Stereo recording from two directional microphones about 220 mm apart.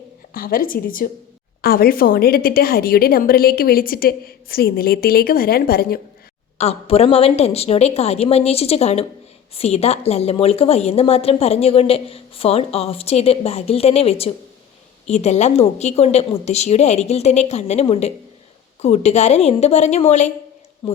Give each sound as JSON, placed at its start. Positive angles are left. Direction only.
{"t": 0.3, "sound": "a woman's voice", "side_deg": 40}
{"t": 6.6, "sound": "a woman's voice", "side_deg": 30}